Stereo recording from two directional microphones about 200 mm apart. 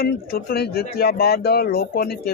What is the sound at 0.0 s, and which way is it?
Speech, 50° left (ahead or behind).